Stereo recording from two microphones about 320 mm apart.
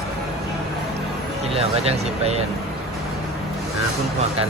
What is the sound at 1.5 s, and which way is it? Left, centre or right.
Speech, centre.